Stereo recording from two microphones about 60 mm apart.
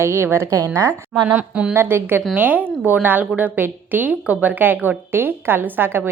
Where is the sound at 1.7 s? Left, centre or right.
Right.